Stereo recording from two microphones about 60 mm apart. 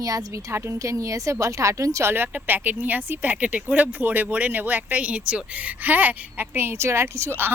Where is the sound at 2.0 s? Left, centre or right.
Right.